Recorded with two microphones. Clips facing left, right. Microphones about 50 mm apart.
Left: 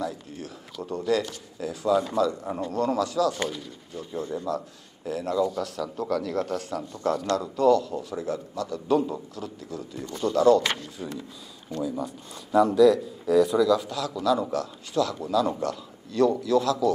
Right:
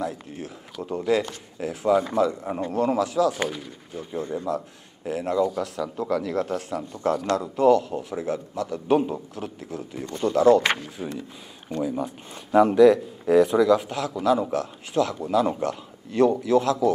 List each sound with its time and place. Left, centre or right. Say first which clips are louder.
0.0 s a man's voice: right 2 dB; right
11.0 s a man's voice: right 3 dB; centre
11.7 s speech: right 3 dB; right